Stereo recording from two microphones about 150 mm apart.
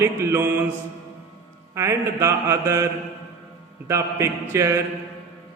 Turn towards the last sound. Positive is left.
turn(degrees=-20)  # may be behind; listen again after turning